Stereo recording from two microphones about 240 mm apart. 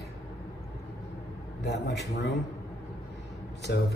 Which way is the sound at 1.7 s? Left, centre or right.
Left.